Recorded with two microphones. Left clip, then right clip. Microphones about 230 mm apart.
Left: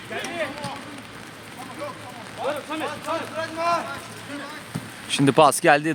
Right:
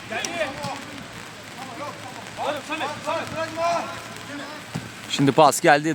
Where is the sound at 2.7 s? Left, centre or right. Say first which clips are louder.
Right 1 dB; right.